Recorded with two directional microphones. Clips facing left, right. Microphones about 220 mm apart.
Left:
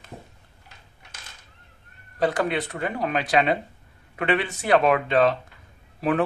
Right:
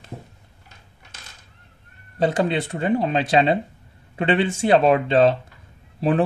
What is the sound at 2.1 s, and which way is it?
Speech, 25° right (ahead or behind).